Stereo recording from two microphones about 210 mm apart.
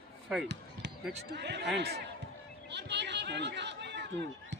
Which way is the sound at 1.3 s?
55° right (ahead or behind).